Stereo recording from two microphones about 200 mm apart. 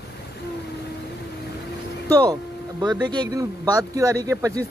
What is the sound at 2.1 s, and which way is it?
Speech, 20° right (ahead or behind).